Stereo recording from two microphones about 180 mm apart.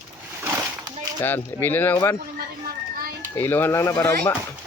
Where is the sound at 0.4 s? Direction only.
15° right (ahead or behind).